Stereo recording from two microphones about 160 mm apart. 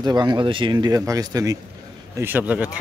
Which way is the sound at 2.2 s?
10° right (ahead or behind).